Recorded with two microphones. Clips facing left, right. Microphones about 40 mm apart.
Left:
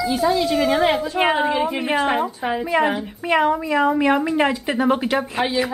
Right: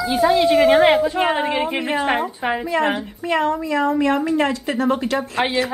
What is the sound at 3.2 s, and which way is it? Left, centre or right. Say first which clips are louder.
A woman's voice: left 2 dB; centre.